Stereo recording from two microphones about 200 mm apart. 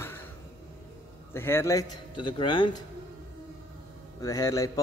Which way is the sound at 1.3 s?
10° left (ahead or behind).